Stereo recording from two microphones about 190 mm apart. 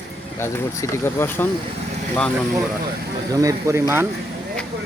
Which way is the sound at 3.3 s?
15° right (ahead or behind).